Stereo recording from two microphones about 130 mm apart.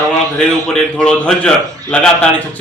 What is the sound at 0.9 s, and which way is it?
Speech, 5° left (ahead or behind).